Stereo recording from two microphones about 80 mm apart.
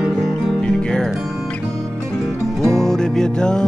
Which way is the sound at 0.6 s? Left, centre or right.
Centre.